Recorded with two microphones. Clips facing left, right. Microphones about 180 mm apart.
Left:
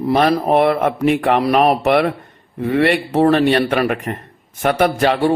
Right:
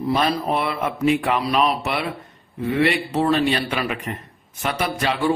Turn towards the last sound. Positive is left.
turn(degrees=55)  # may be behind; listen again after turning